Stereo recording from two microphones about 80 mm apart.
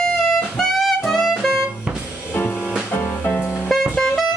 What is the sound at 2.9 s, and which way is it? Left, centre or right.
Music, left.